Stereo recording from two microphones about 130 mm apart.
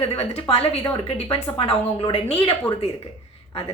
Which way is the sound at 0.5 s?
55° left (ahead or behind).